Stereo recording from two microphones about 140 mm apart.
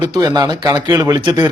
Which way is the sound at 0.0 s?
30° right (ahead or behind).